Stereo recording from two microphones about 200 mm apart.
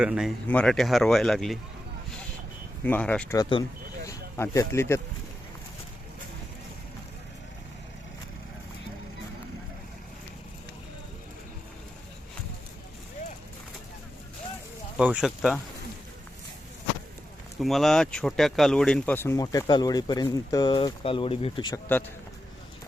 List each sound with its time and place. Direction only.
0.0 s speech: 5° right (ahead or behind)
2.8 s speech: 5° left (ahead or behind)
4.0 s a sound: 15° left (ahead or behind)
14.9 s speech: 5° right (ahead or behind)
17.6 s speech: centre (ahead or behind); by 21.8 s 25° left (ahead or behind)